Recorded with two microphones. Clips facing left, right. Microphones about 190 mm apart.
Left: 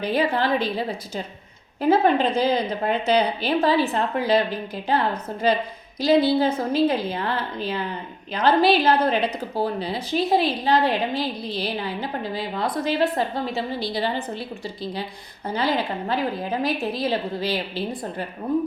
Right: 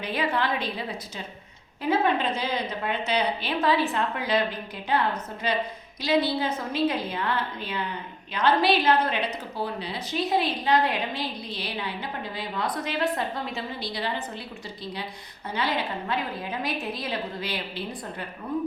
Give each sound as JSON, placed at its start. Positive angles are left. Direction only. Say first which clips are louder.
{"t": 0.0, "sound": "a woman's voice", "louder": "left 5 dB", "side_deg": 35}
{"t": 15.5, "sound": "a woman's voice", "louder": "left 4 dB", "side_deg": 35}